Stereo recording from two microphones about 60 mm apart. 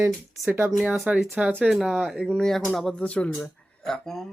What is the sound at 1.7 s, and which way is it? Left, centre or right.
Speech, centre.